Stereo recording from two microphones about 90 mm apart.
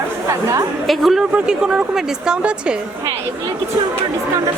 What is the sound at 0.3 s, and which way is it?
Speech, 35° right (ahead or behind).